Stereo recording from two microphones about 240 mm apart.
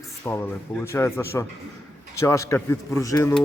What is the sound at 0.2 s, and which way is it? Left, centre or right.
A man's voice, centre.